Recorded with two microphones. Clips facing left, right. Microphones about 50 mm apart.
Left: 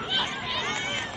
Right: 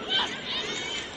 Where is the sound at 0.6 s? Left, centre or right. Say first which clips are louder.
Left 4 dB; left.